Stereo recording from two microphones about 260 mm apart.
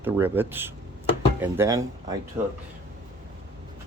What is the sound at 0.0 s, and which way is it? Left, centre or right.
Speech, centre.